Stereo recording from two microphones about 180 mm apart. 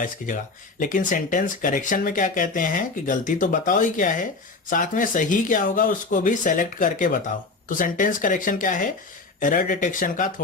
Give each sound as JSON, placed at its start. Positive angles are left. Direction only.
{"t": 0.2, "sound": "speech", "side_deg": 50}